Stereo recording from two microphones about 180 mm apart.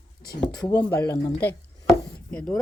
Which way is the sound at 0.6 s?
15° left (ahead or behind).